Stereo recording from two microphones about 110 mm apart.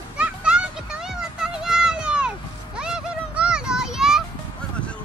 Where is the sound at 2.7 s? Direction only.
5° right (ahead or behind).